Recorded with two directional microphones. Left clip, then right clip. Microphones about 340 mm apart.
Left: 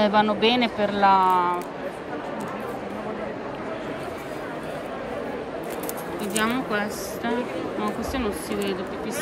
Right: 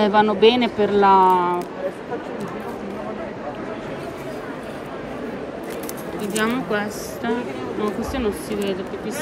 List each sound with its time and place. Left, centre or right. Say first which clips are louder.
0.0 s speech: right 5 dB; centre
6.3 s speech: right 3 dB; centre